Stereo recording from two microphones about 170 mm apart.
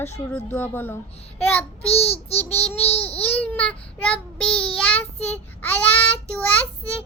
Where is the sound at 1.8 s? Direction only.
35° left (ahead or behind).